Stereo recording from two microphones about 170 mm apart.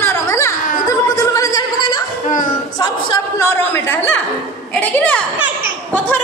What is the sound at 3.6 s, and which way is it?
A woman's voice, 15° left (ahead or behind).